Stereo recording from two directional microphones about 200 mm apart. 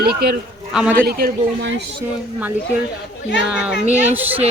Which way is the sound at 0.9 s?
50° right (ahead or behind).